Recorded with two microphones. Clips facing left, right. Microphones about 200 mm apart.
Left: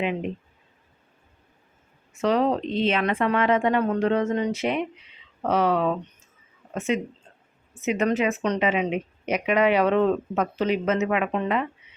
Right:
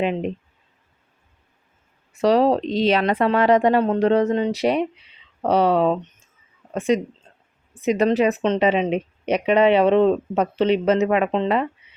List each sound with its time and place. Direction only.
2.2 s speech: 35° right (ahead or behind)